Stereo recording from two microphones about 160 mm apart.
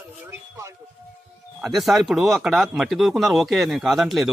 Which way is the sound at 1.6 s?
Centre (ahead or behind).